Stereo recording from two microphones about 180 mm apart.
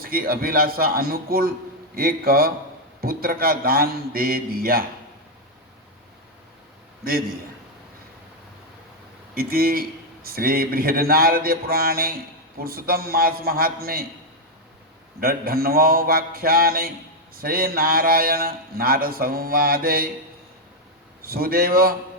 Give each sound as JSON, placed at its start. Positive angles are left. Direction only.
{"t": 0.0, "sound": "a man's voice", "side_deg": -55}
{"t": 9.3, "sound": "a man's voice", "side_deg": -55}
{"t": 15.2, "sound": "a man's voice", "side_deg": -55}
{"t": 21.2, "sound": "a man's voice", "side_deg": -55}